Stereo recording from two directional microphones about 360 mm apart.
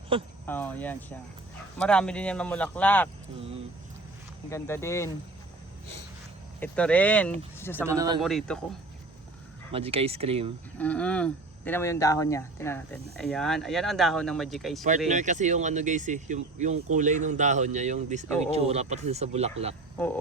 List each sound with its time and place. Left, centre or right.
0.1 s speech: centre
0.4 s speech: centre
4.4 s speech: centre
6.6 s speech: centre
7.9 s speech: centre
8.2 s speech: centre
9.7 s speech: centre
10.8 s speech: centre
14.8 s speech: centre